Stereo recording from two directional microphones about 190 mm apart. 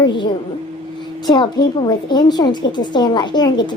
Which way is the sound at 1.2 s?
25° left (ahead or behind).